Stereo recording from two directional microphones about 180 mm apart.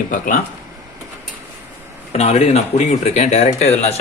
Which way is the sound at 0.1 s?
50° left (ahead or behind).